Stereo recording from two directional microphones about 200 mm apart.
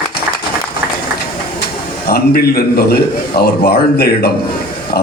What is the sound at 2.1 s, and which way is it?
A man's voice, 50° left (ahead or behind).